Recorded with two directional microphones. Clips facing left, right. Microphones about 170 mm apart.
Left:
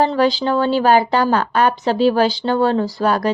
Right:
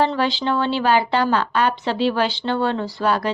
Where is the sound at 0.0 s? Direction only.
40° left (ahead or behind).